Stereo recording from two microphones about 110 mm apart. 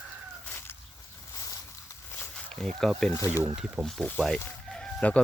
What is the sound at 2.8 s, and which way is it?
Speech, 5° left (ahead or behind).